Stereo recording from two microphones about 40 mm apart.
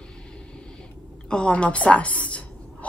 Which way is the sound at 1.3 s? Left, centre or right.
Left.